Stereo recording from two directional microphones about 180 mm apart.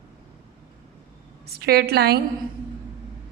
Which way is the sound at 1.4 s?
60° right (ahead or behind).